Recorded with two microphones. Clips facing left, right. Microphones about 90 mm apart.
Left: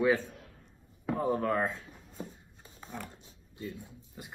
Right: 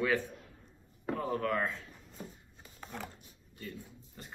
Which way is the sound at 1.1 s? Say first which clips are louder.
Left 3 dB; 25° left (ahead or behind).